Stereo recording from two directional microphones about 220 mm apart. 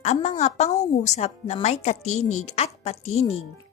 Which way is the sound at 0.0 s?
30° left (ahead or behind).